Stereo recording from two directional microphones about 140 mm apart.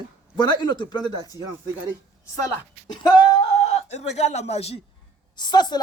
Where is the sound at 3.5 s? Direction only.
50° left (ahead or behind).